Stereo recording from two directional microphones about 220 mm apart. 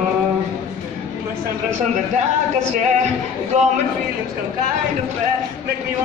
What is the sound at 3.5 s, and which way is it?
Speech, 35° right (ahead or behind).